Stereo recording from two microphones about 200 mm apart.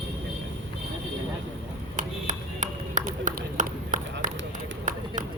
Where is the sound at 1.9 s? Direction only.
40° right (ahead or behind).